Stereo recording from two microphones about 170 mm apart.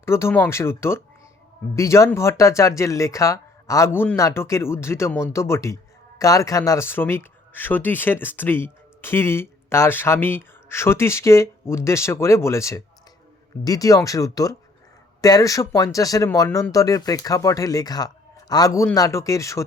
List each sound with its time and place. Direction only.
0.0 s speech: 15° left (ahead or behind)